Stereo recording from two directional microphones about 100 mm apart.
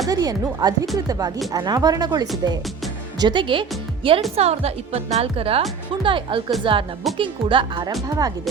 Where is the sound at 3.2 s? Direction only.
55° right (ahead or behind).